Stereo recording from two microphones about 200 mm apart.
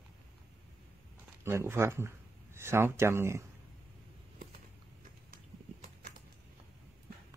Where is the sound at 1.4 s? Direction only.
10° right (ahead or behind).